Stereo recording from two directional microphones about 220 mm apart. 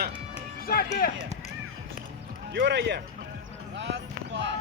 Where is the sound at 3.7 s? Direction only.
55° right (ahead or behind).